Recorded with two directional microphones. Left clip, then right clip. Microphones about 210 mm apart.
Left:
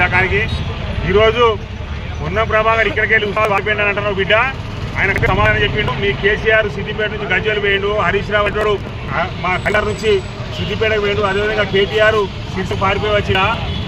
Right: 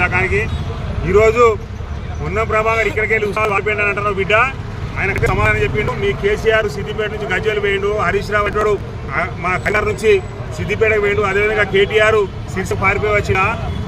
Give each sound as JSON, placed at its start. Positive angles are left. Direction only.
{"t": 0.0, "sound": "vehicle", "side_deg": -25}
{"t": 1.1, "sound": "speech", "side_deg": -25}